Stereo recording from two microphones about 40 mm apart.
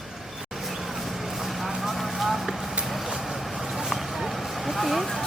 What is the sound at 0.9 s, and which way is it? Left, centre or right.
Vehicle, centre.